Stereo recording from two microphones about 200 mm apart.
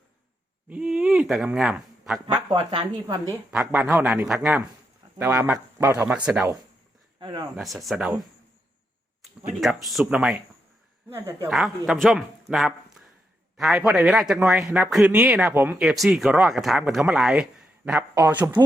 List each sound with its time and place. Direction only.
0.7 s speech: 5° right (ahead or behind)
2.2 s speech: 25° right (ahead or behind)
3.5 s a man's voice: 5° right (ahead or behind)
7.2 s speech: 25° right (ahead or behind)
7.5 s speech: centre (ahead or behind)
9.6 s a man's voice: centre (ahead or behind)
11.4 s a man's voice: centre (ahead or behind)